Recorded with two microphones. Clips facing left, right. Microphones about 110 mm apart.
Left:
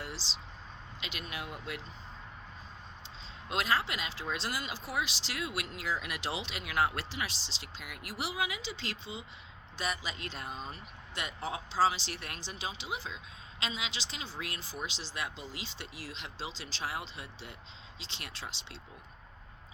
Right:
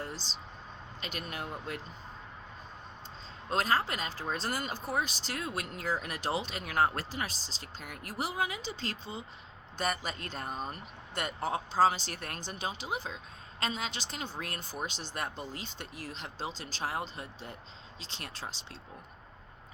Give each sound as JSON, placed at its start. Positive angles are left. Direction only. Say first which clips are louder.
{"t": 0.0, "sound": "a sound", "louder": "right 2 dB", "side_deg": -45}
{"t": 1.0, "sound": "speech", "louder": "right 2 dB", "side_deg": -45}
{"t": 3.5, "sound": "speech", "louder": "right 2 dB", "side_deg": -40}